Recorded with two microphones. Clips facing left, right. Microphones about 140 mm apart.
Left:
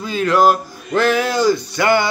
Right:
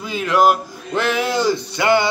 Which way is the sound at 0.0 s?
15° right (ahead or behind).